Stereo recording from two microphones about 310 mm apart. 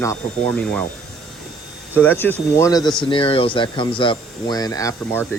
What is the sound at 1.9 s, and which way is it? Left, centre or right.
Speech, centre.